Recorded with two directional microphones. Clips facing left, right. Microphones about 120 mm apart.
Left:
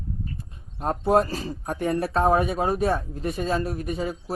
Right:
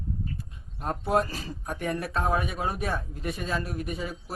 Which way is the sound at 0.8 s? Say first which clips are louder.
Left 5 dB; 30° left (ahead or behind).